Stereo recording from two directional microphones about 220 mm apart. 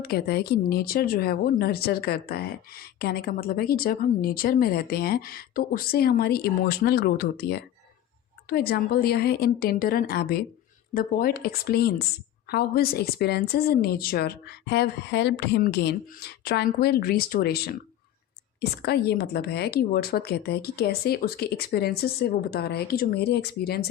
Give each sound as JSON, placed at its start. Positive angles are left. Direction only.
{"t": 0.0, "sound": "speech", "side_deg": 45}
{"t": 18.8, "sound": "speech", "side_deg": 45}